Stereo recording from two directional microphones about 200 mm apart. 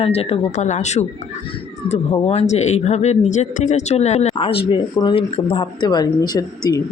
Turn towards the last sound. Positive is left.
turn(degrees=20)  # may be behind; listen again after turning